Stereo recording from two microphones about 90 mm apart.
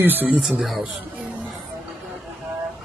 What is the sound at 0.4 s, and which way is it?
Speech, 5° right (ahead or behind).